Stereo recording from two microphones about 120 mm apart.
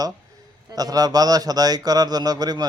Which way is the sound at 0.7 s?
30° right (ahead or behind).